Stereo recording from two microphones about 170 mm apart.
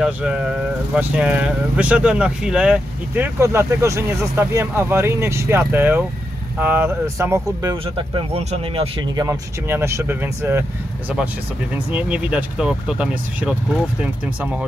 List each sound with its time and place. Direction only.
0.0 s speech: 5° right (ahead or behind)
7.7 s speech: 30° right (ahead or behind)
9.2 s speech: 15° right (ahead or behind)
11.9 s speech: 5° right (ahead or behind)